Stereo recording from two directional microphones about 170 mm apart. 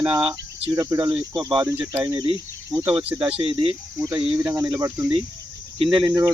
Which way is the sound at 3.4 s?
35° right (ahead or behind).